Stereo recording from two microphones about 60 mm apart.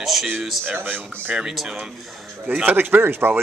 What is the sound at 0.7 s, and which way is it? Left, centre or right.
Speech, right.